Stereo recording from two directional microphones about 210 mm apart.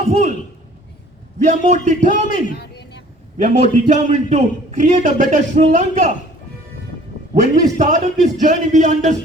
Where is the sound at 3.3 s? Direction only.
30° right (ahead or behind).